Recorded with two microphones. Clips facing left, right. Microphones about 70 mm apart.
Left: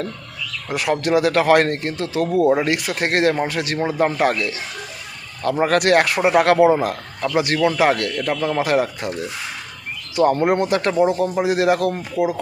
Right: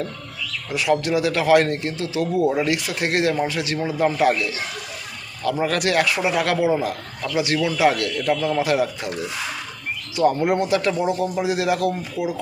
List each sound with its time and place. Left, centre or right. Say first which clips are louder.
0.7 s a man's voice: left 2 dB; left
10.2 s speech: left 2 dB; left